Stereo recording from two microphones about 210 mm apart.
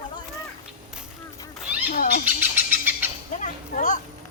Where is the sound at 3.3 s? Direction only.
35° left (ahead or behind).